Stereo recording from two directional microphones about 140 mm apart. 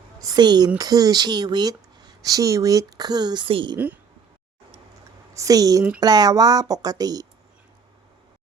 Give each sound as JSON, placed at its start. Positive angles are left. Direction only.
{"t": 0.2, "sound": "speech", "side_deg": -30}
{"t": 5.3, "sound": "speech", "side_deg": -25}